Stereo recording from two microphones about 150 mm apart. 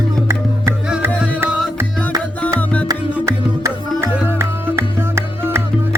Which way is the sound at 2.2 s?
10° left (ahead or behind).